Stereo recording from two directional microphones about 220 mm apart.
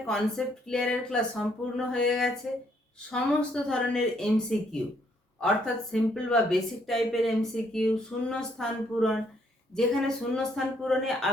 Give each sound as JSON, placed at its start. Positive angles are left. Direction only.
{"t": 0.1, "sound": "speech", "side_deg": 0}